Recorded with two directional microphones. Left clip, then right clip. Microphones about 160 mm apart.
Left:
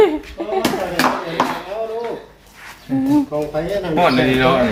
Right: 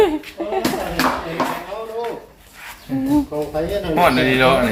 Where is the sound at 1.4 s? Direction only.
55° left (ahead or behind).